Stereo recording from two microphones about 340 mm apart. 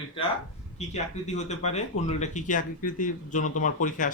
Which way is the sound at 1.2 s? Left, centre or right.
Centre.